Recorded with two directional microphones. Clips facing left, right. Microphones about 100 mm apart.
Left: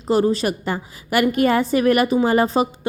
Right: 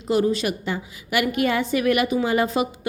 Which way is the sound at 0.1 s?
35° left (ahead or behind).